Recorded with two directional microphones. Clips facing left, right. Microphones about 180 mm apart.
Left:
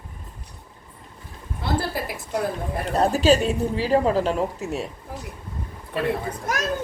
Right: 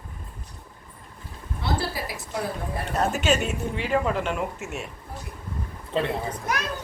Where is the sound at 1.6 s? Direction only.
50° left (ahead or behind).